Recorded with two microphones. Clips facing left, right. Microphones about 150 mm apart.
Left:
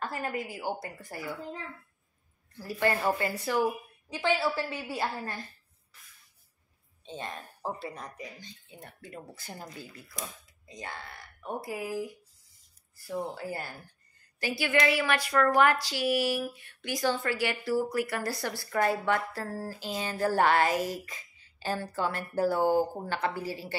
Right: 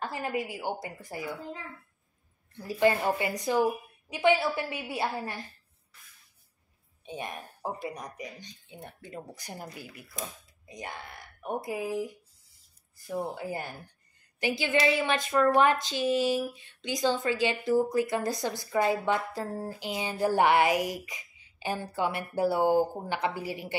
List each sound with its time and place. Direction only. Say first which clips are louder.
0.0 s speech: right 2 dB; 20° right (ahead or behind)
2.5 s speech: right 4 dB; 15° right (ahead or behind)
7.1 s speech: right 1 dB; 15° right (ahead or behind)
13.3 s speech: right 2 dB; 20° right (ahead or behind)